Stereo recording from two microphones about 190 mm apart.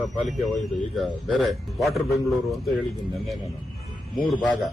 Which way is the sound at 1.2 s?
Centre (ahead or behind).